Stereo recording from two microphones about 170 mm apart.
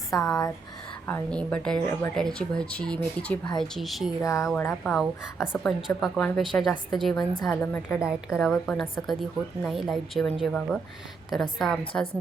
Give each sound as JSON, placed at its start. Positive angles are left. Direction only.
{"t": 0.1, "sound": "speech", "side_deg": 20}
{"t": 1.0, "sound": "a woman's voice", "side_deg": 10}
{"t": 4.2, "sound": "a woman's voice", "side_deg": 20}
{"t": 7.9, "sound": "a woman's voice", "side_deg": -5}